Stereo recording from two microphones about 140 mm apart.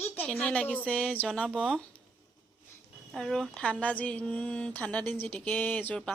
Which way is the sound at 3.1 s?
Centre (ahead or behind).